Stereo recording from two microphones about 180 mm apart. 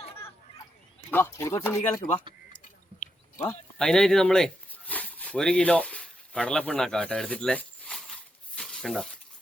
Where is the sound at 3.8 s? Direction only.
5° left (ahead or behind).